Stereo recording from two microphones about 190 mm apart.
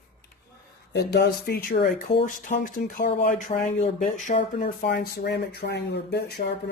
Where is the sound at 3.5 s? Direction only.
35° left (ahead or behind).